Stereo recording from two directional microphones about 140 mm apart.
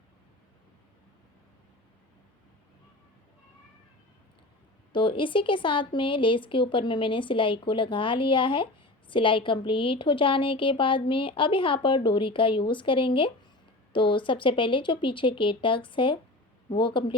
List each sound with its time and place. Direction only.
4.9 s speech: 35° left (ahead or behind)